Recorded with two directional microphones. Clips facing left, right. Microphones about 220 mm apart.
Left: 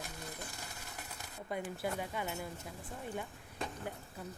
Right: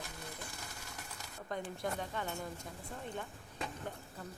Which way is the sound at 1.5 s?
10° left (ahead or behind).